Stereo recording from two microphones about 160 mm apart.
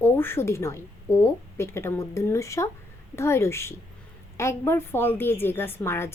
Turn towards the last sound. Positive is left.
turn(degrees=15)  # may be behind; listen again after turning